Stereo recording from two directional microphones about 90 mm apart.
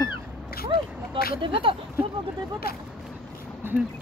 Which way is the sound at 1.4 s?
75° right (ahead or behind).